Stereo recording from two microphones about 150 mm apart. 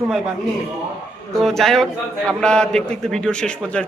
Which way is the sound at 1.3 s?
Centre (ahead or behind).